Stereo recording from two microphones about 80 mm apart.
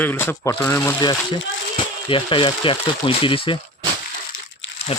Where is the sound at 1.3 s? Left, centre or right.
Left.